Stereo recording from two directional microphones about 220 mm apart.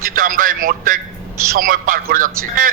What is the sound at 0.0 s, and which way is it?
A man's voice, 40° right (ahead or behind).